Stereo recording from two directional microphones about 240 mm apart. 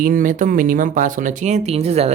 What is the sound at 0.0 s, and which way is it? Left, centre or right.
A man's voice, right.